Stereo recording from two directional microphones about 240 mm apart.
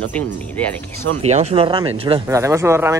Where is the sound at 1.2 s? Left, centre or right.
Right; by 2.9 s centre.